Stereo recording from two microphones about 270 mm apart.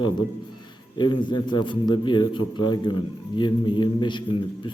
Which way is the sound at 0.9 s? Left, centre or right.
Centre.